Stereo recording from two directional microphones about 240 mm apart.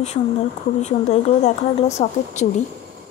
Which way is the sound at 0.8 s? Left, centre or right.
Left.